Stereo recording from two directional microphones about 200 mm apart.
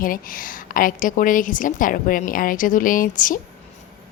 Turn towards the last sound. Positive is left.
turn(degrees=40)  # may be behind; listen again after turning